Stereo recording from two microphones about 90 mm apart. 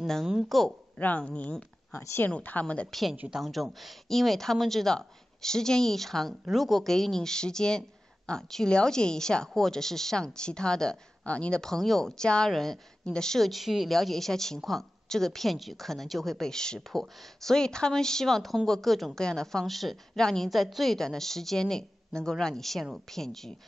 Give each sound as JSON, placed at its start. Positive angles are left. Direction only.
{"t": 0.0, "sound": "speech", "side_deg": 0}
{"t": 0.9, "sound": "speech", "side_deg": 15}
{"t": 2.0, "sound": "speech", "side_deg": 25}
{"t": 2.3, "sound": "a woman's voice", "side_deg": 15}
{"t": 2.9, "sound": "a woman's voice", "side_deg": 0}